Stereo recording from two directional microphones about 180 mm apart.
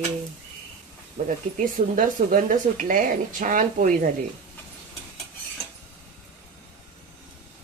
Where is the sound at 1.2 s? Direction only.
50° right (ahead or behind).